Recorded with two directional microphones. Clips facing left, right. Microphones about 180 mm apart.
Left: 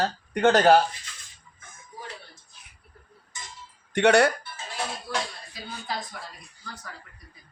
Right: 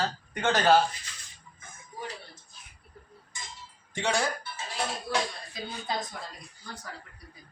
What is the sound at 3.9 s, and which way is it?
Speech, 65° left (ahead or behind).